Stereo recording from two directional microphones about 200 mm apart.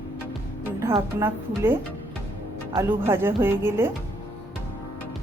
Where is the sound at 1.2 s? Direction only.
10° right (ahead or behind).